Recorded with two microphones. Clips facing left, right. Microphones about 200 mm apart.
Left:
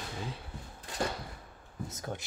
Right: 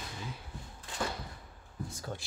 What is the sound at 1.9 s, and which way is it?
Speech, 20° left (ahead or behind).